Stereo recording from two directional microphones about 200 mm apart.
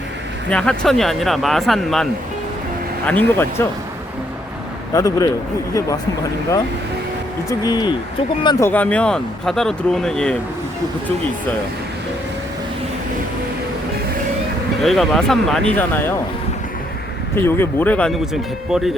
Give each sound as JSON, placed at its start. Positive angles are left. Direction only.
{"t": 0.5, "sound": "speech", "side_deg": 5}
{"t": 3.1, "sound": "speech", "side_deg": 10}
{"t": 4.9, "sound": "speech", "side_deg": 15}
{"t": 7.6, "sound": "speech", "side_deg": 20}
{"t": 14.8, "sound": "speech", "side_deg": 0}
{"t": 17.4, "sound": "speech", "side_deg": 10}